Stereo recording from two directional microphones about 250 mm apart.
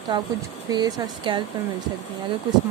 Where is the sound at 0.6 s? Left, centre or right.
Centre.